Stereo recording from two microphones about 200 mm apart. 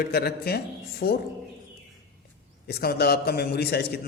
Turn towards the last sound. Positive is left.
turn(degrees=55)  # may be behind; listen again after turning